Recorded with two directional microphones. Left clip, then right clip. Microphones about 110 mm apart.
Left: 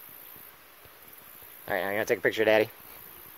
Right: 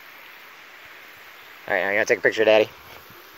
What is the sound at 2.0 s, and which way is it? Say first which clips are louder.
Speech: right 5 dB; 25° left (ahead or behind).